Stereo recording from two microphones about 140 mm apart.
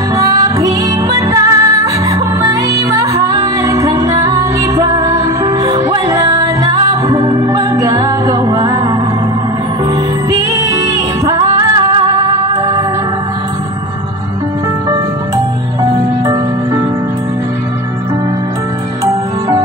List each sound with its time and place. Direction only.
0.1 s music: 25° right (ahead or behind)
10.3 s music: 25° right (ahead or behind)